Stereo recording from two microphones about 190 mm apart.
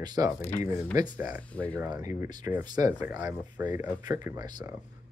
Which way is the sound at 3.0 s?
10° right (ahead or behind).